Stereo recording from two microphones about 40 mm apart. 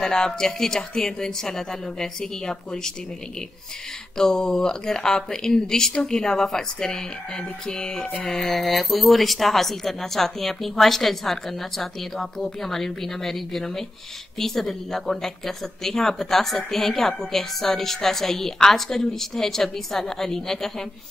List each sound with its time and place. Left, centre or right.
0.0 s speech: centre
4.2 s speech: centre